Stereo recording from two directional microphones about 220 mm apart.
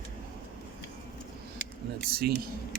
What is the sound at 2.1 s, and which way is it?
Speech, 45° right (ahead or behind).